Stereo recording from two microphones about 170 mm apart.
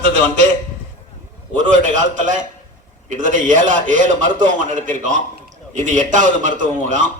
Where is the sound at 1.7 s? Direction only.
45° right (ahead or behind).